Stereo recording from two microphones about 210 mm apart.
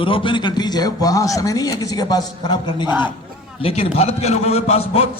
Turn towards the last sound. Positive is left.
turn(degrees=30)  # may be behind; listen again after turning